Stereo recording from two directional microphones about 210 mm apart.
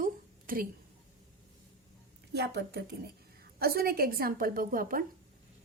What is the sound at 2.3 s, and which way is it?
A woman's voice, 50° right (ahead or behind).